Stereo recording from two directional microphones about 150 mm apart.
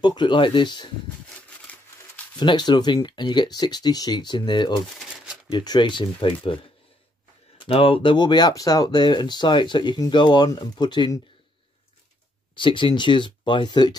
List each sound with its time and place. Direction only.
0.0 s speech: 30° left (ahead or behind)
1.7 s a sound: 10° left (ahead or behind)
2.3 s speech: 30° left (ahead or behind)
4.9 s shuffling cards: 5° right (ahead or behind)
5.5 s speech: 30° left (ahead or behind)
12.5 s speech: 35° left (ahead or behind)